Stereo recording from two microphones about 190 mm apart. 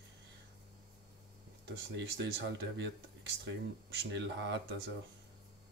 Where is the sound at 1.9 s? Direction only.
65° right (ahead or behind).